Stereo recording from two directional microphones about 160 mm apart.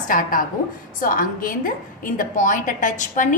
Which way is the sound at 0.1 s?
60° left (ahead or behind).